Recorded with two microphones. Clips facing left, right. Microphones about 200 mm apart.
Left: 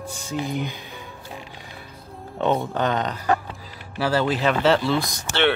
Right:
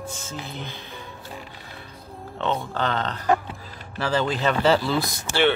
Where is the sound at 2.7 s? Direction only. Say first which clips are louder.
Left 3 dB; 15° left (ahead or behind).